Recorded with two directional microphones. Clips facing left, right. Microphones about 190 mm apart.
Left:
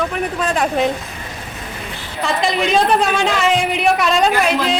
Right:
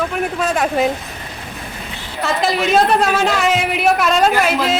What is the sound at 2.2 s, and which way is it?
A woman's voice, centre (ahead or behind).